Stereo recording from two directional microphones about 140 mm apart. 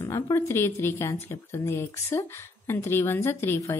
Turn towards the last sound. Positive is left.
turn(degrees=20)  # may be behind; listen again after turning